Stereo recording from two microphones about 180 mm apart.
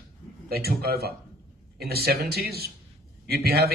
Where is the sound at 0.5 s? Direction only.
60° right (ahead or behind).